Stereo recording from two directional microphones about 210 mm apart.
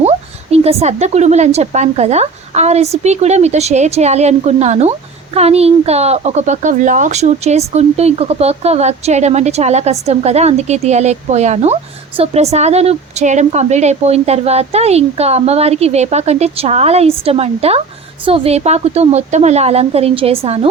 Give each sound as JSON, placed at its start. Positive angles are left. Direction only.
{"t": 0.0, "sound": "a woman's voice", "side_deg": -30}